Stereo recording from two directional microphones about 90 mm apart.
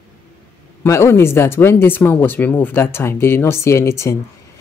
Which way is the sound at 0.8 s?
30° left (ahead or behind).